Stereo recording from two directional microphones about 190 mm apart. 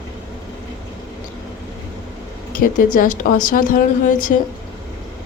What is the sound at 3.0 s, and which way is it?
Speech, 45° left (ahead or behind).